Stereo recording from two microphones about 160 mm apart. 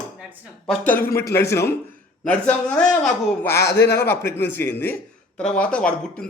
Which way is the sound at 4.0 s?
15° left (ahead or behind).